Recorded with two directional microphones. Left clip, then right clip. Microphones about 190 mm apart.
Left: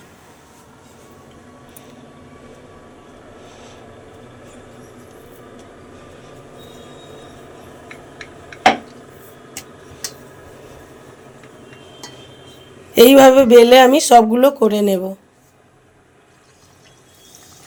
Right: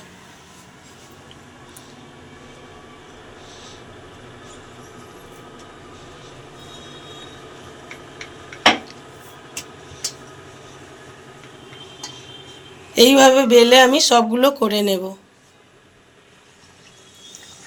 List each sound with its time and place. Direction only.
12.9 s speech: 45° left (ahead or behind)